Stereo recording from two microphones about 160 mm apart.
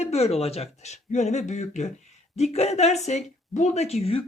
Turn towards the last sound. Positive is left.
turn(degrees=40)  # may be behind; listen again after turning